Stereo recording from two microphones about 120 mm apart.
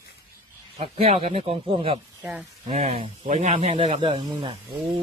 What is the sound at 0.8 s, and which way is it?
Speech, 55° right (ahead or behind).